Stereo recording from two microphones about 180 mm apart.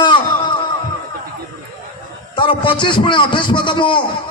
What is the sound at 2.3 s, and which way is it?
A man's voice, 30° left (ahead or behind).